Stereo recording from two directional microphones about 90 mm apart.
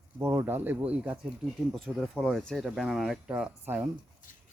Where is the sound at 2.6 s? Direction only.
5° right (ahead or behind).